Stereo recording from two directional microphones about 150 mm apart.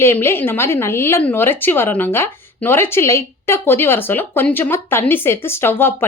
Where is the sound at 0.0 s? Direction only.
15° left (ahead or behind).